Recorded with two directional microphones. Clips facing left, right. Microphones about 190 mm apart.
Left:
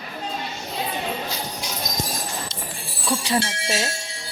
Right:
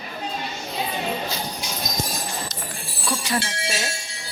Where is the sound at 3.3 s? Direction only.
30° left (ahead or behind).